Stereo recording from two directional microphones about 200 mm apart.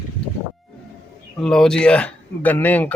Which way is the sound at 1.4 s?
5° left (ahead or behind).